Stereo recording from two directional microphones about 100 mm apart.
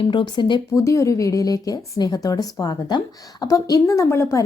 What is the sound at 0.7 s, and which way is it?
A woman's voice, 30° left (ahead or behind).